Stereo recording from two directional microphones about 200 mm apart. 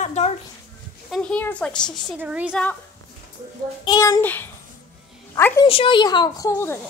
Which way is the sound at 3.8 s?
20° left (ahead or behind).